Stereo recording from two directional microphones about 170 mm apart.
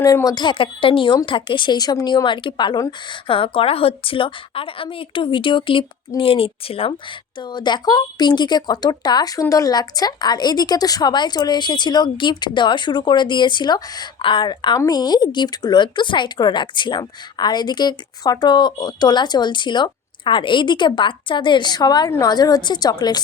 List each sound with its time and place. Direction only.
0.0 s a woman's voice: 20° left (ahead or behind)